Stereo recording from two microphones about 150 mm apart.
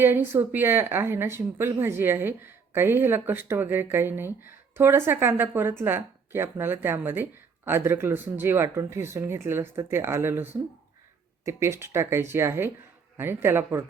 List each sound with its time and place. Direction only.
0.0 s speech: 15° right (ahead or behind)